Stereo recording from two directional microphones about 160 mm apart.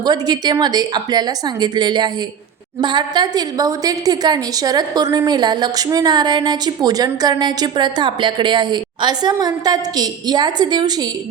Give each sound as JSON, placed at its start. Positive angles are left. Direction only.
{"t": 0.0, "sound": "a woman's voice", "side_deg": -25}